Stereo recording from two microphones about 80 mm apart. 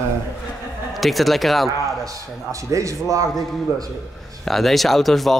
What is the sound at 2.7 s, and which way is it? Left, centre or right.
Speech, right.